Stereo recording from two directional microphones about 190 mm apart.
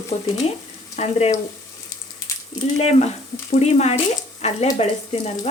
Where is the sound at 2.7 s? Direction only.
35° left (ahead or behind).